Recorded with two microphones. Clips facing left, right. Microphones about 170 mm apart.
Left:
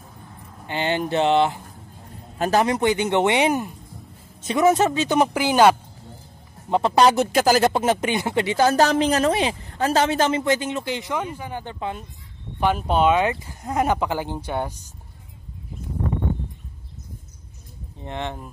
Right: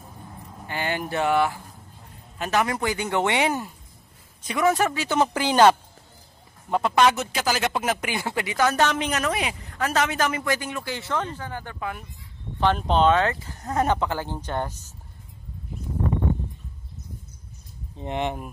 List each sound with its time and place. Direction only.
0.7 s speech: 25° left (ahead or behind)
2.3 s a man's voice: 40° left (ahead or behind)
2.6 s speech: 25° left (ahead or behind)
6.7 s speech: 30° left (ahead or behind)
12.5 s speech: 10° left (ahead or behind)
18.0 s speech: 15° right (ahead or behind)